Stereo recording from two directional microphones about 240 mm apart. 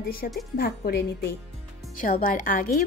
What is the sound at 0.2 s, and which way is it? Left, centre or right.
Speech, left.